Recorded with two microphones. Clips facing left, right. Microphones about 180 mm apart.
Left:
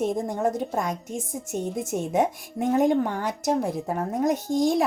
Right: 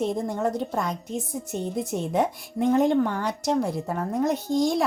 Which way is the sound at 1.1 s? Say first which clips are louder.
Even; centre (ahead or behind).